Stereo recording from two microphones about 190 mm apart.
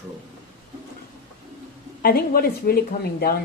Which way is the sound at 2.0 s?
50° left (ahead or behind).